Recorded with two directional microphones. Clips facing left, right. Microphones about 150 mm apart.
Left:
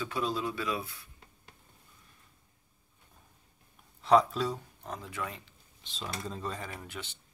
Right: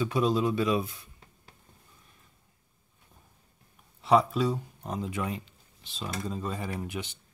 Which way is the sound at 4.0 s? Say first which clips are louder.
Right 1 dB; 5° right (ahead or behind).